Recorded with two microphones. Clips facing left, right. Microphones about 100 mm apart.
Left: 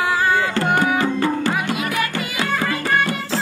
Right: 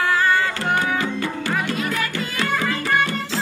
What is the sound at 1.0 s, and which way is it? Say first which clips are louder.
Music: left 5 dB; 40° left (ahead or behind).